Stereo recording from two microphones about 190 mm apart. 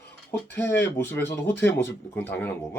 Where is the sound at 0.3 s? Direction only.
10° left (ahead or behind).